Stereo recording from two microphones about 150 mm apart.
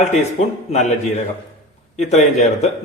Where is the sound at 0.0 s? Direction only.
50° left (ahead or behind).